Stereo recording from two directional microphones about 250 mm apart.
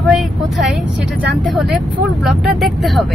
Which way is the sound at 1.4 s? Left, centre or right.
Centre.